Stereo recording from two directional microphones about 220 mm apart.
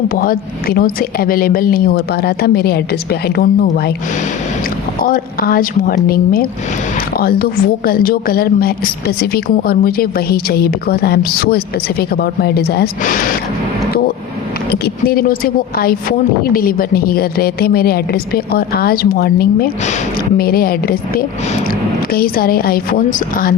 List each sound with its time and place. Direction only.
0.1 s a woman's voice: 40° left (ahead or behind)
5.0 s a woman's voice: 40° left (ahead or behind)
14.7 s a woman's voice: 45° left (ahead or behind)